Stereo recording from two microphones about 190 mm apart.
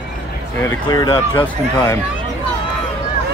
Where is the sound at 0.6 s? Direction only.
15° left (ahead or behind).